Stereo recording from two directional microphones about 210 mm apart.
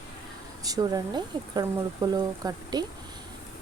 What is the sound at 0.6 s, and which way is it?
Speech, 15° right (ahead or behind).